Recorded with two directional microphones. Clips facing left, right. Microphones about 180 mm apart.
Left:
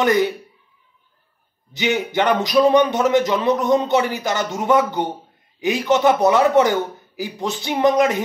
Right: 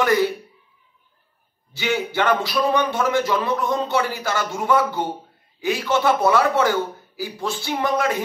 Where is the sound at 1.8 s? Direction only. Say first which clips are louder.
Left 3 dB; 20° left (ahead or behind).